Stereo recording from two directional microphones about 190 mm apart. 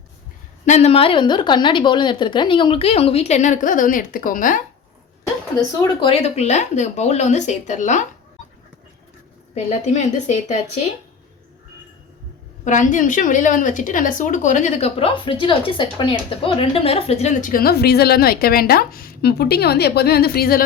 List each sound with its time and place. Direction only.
0.6 s a woman's voice: 35° left (ahead or behind)
5.8 s a woman's voice: 30° left (ahead or behind)
9.6 s a woman's voice: 35° left (ahead or behind)
12.6 s a woman's voice: 40° left (ahead or behind)